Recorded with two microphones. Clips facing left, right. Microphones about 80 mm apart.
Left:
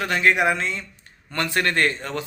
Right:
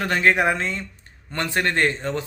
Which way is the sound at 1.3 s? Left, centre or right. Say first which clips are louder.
Even; right.